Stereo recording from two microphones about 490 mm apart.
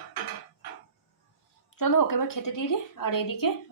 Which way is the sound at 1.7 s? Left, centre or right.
Left.